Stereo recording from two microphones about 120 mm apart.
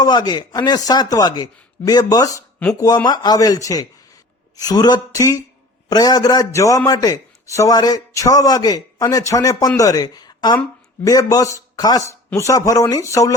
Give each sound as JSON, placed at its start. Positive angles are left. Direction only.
{"t": 0.0, "sound": "a man's voice", "side_deg": 35}